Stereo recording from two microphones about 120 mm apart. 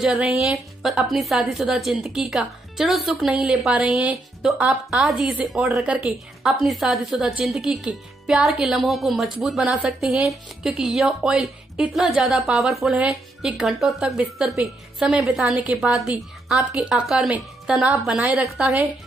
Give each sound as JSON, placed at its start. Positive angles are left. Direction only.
{"t": 0.0, "sound": "a woman's voice", "side_deg": -5}